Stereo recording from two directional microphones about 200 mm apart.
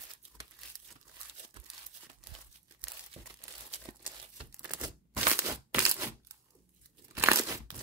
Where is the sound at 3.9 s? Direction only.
35° right (ahead or behind).